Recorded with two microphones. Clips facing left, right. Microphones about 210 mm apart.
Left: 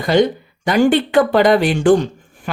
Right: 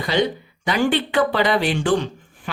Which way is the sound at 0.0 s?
45° left (ahead or behind).